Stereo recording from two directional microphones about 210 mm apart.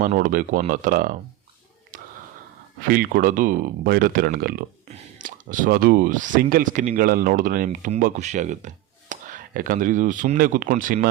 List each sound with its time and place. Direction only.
0.0 s speech: 40° right (ahead or behind)
1.9 s a sound: 40° right (ahead or behind)
2.9 s speech: 45° right (ahead or behind)